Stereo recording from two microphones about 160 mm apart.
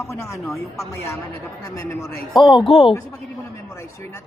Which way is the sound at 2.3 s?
30° left (ahead or behind).